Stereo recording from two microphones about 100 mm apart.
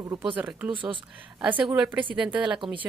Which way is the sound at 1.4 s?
15° right (ahead or behind).